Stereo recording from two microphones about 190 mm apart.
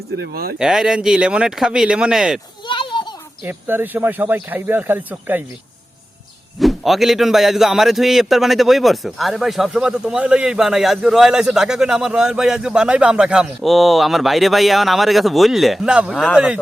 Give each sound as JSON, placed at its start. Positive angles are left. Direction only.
{"t": 0.2, "sound": "speech", "side_deg": -50}
{"t": 0.6, "sound": "a man's voice", "side_deg": -5}
{"t": 2.6, "sound": "a sound", "side_deg": 25}
{"t": 3.4, "sound": "speech", "side_deg": -10}
{"t": 6.6, "sound": "a man's voice", "side_deg": 0}